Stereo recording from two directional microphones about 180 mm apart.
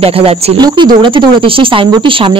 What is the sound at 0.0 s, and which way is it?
Speech, 30° right (ahead or behind).